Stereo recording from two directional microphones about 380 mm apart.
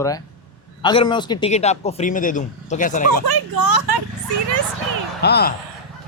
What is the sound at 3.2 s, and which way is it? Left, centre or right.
Speech, right.